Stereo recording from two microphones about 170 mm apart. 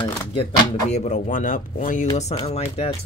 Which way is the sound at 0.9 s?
40° left (ahead or behind).